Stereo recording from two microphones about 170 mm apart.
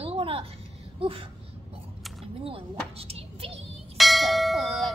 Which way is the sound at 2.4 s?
35° right (ahead or behind).